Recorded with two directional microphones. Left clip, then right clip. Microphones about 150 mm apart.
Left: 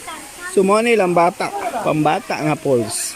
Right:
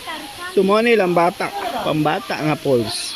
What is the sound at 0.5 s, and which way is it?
Speech, 5° left (ahead or behind).